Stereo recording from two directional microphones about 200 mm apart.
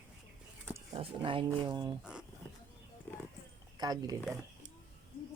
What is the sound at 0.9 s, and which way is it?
Speech, 25° right (ahead or behind).